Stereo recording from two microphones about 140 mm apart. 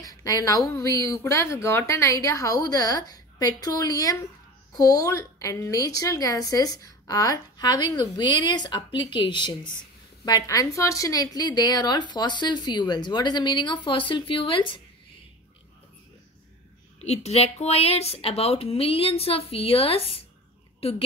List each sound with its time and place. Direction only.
0.0 s a woman's voice: 25° left (ahead or behind)
17.0 s speech: 50° left (ahead or behind)